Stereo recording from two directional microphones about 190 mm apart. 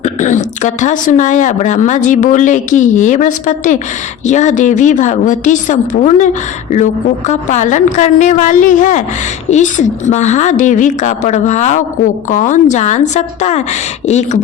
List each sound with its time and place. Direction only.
0.0 s a woman's voice: 40° left (ahead or behind)